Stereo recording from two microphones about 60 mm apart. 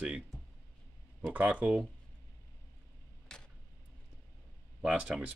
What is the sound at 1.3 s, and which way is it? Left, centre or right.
Speech, right.